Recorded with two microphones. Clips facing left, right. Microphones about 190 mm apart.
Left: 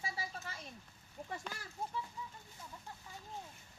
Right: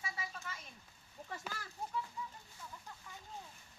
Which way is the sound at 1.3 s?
20° left (ahead or behind).